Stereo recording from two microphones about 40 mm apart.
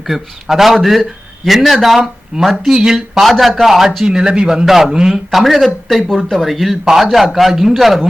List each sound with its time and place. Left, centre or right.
0.1 s a man's voice: centre
2.3 s a man's voice: right
3.2 s a man's voice: centre
4.0 s a man's voice: centre
4.5 s a man's voice: centre
5.3 s a man's voice: centre